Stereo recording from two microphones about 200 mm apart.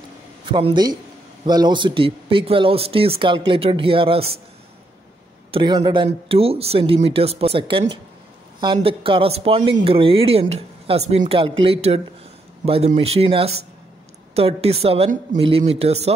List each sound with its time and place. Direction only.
0.5 s speech: 25° right (ahead or behind)
5.5 s speech: 25° right (ahead or behind)